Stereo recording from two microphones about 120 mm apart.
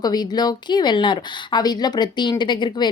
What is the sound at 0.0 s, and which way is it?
A woman's voice, 35° left (ahead or behind).